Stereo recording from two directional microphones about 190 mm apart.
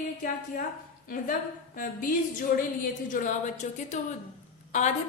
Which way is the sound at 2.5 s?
45° left (ahead or behind).